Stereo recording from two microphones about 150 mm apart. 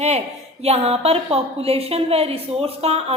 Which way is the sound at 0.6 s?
45° right (ahead or behind).